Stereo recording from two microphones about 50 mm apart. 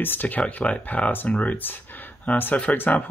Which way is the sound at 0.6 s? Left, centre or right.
Left.